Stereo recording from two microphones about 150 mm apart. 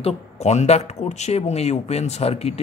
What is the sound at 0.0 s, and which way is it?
Speech, 50° left (ahead or behind).